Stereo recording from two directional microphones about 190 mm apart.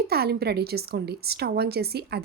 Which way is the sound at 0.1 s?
55° right (ahead or behind).